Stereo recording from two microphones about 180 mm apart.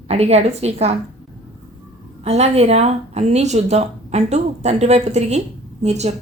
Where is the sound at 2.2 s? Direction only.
35° right (ahead or behind).